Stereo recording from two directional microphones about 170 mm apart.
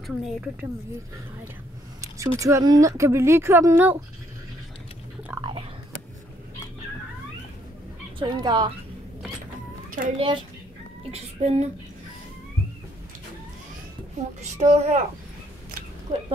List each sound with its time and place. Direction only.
0.0 s a woman's voice: 5° right (ahead or behind)
2.0 s speech: 20° right (ahead or behind)
5.4 s biting: 30° right (ahead or behind)
8.2 s speech: 25° right (ahead or behind)
10.1 s speech: 30° right (ahead or behind)
14.4 s speech: 40° right (ahead or behind)
16.1 s speech: 45° right (ahead or behind)